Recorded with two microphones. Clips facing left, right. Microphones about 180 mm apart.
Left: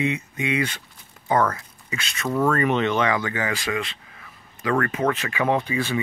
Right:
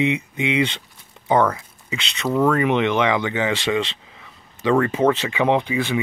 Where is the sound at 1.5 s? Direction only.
15° right (ahead or behind).